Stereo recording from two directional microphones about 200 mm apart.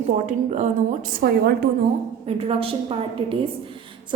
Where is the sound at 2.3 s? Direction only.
30° right (ahead or behind).